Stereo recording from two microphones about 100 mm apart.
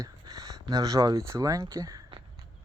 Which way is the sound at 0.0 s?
40° right (ahead or behind).